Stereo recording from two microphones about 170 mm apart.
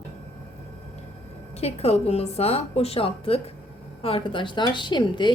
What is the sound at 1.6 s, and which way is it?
A woman's voice, 35° left (ahead or behind).